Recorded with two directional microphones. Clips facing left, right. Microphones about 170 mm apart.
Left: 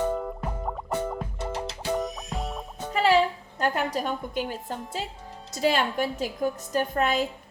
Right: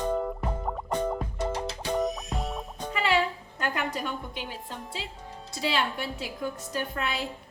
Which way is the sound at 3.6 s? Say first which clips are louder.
Left 4 dB; 40° left (ahead or behind).